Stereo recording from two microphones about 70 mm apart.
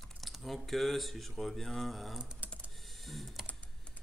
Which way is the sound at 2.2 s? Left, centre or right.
Centre.